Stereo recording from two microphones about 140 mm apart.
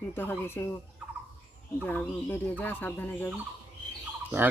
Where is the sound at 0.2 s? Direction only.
15° left (ahead or behind).